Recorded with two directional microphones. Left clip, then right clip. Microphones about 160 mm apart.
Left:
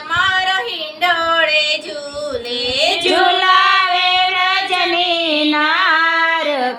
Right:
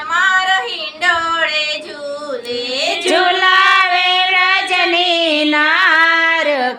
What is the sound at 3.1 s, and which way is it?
Child singing, 10° right (ahead or behind).